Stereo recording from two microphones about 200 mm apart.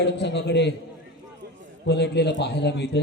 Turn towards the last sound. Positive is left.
turn(degrees=55)  # may be behind; listen again after turning